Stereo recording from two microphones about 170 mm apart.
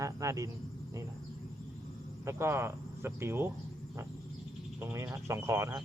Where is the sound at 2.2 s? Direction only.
15° right (ahead or behind).